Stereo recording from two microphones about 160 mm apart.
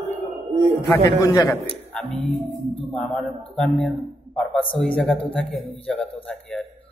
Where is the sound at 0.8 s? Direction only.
20° left (ahead or behind).